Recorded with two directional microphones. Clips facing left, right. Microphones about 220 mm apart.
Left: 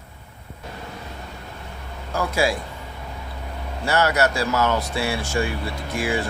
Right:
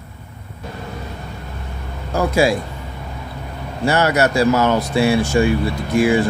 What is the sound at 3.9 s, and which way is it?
Speech, 15° right (ahead or behind).